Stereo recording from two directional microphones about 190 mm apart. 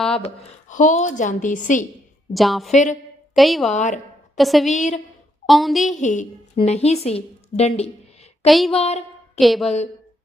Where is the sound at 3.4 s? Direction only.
Centre (ahead or behind).